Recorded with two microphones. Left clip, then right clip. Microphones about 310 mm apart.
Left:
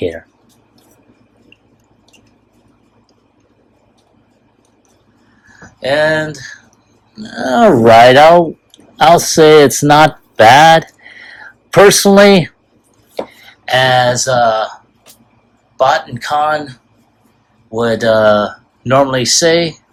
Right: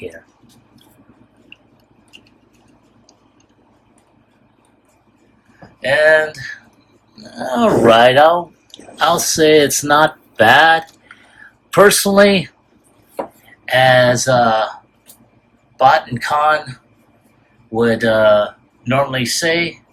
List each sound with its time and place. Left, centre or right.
5.8 s speech: centre
7.4 s speech: left
13.7 s speech: centre
15.8 s speech: centre